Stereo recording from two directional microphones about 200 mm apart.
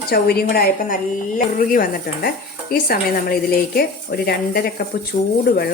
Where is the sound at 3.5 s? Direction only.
50° left (ahead or behind).